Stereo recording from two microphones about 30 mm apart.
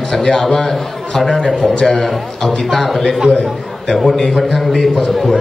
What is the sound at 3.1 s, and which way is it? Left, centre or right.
Speech, right.